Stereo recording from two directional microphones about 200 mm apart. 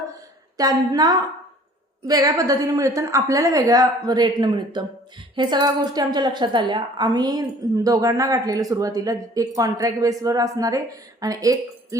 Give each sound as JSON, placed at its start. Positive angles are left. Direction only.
{"t": 0.5, "sound": "a woman's voice", "side_deg": -20}